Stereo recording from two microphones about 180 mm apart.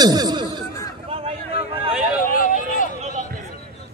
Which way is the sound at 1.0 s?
30° right (ahead or behind).